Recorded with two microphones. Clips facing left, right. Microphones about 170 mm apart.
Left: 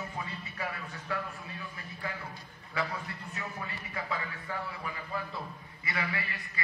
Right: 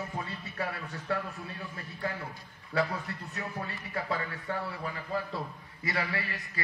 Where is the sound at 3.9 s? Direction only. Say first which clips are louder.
Right 4 dB; 40° right (ahead or behind).